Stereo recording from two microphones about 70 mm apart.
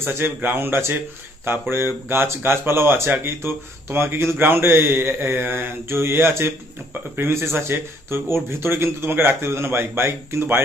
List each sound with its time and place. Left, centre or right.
0.0 s speech: right